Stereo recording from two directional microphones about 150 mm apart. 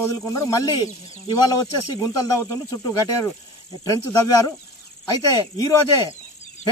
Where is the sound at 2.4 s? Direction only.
20° left (ahead or behind).